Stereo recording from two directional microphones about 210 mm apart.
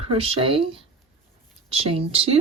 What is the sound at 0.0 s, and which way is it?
Speech, 25° right (ahead or behind).